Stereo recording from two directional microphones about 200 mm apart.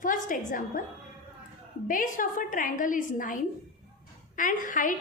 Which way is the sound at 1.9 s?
40° left (ahead or behind).